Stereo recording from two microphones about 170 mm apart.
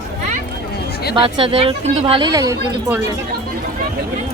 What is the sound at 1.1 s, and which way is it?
Speech, 30° right (ahead or behind).